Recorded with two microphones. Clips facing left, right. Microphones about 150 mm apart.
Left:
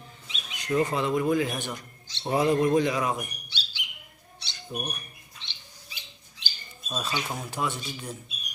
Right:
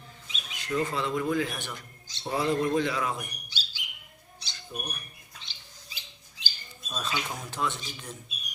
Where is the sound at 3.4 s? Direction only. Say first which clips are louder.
Left 1 dB; 40° right (ahead or behind).